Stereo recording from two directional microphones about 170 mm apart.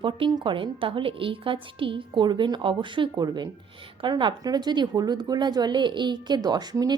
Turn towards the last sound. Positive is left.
turn(degrees=-25)  # may be behind; listen again after turning